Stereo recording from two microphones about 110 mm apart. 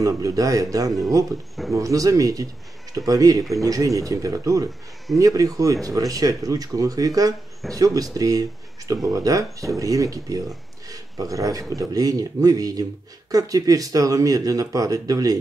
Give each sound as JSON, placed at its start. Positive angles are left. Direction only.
{"t": 0.0, "sound": "speech", "side_deg": -30}